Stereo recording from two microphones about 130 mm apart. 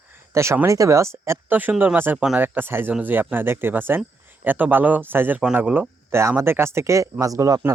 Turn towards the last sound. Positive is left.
turn(degrees=-25)  # may be behind; listen again after turning